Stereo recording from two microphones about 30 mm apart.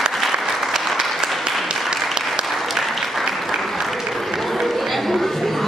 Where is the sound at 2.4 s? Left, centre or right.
Centre.